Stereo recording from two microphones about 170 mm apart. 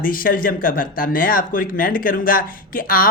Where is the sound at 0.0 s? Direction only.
55° left (ahead or behind).